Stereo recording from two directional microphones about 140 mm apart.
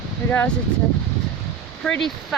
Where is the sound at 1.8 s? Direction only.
5° left (ahead or behind).